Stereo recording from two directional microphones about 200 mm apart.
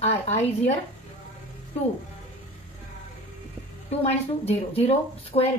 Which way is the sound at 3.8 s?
30° left (ahead or behind).